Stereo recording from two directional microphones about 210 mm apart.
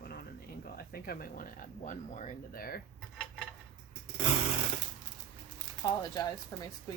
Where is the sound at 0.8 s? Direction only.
45° left (ahead or behind).